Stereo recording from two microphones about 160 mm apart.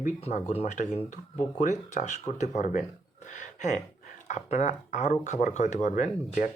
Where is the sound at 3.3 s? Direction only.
50° left (ahead or behind).